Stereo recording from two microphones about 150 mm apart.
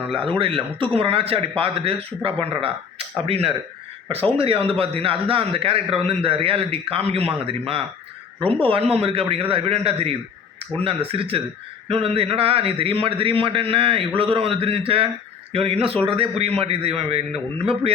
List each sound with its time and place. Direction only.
0.1 s a man's voice: 35° right (ahead or behind)